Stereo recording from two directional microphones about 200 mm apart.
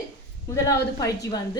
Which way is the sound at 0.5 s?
15° left (ahead or behind).